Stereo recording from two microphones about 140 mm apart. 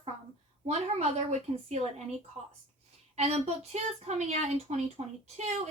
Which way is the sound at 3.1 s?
50° right (ahead or behind).